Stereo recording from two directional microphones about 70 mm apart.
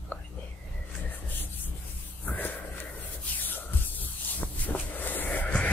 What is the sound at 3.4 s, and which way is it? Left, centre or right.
Music, left.